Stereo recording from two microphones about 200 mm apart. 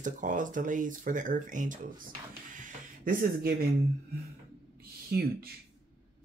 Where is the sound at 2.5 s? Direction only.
40° right (ahead or behind).